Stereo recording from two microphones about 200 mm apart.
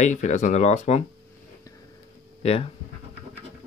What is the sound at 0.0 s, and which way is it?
Speech, 35° left (ahead or behind).